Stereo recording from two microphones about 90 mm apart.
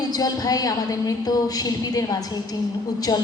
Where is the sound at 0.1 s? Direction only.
45° left (ahead or behind).